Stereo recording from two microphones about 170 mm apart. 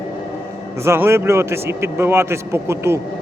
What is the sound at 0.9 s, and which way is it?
A man's voice, 15° right (ahead or behind).